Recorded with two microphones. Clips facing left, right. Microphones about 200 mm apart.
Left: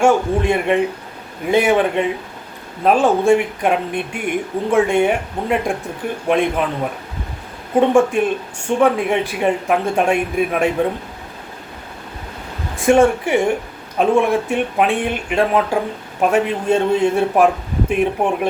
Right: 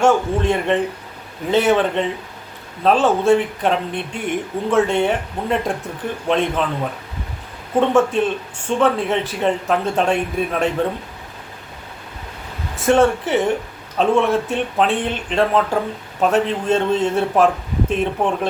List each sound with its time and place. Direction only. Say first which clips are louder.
0.0 s speech: left 1 dB; 10° left (ahead or behind)
7.8 s speech: left 2 dB; 10° left (ahead or behind)
12.8 s speech: left 2 dB; 10° left (ahead or behind)